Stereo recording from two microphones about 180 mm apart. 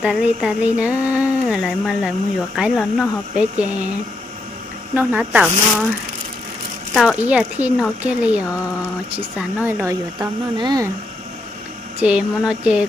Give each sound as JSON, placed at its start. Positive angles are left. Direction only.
{"t": 0.0, "sound": "speech", "side_deg": -5}
{"t": 4.9, "sound": "speech", "side_deg": -10}
{"t": 6.9, "sound": "speech", "side_deg": -5}
{"t": 11.9, "sound": "speech", "side_deg": -5}